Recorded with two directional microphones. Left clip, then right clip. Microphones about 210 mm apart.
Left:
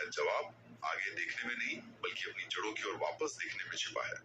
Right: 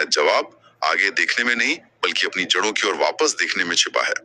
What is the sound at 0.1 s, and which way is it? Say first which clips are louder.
A man's voice: right 17 dB; 45° right (ahead or behind).